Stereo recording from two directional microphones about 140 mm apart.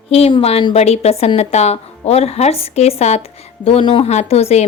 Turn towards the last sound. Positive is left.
turn(degrees=50)  # may be behind; listen again after turning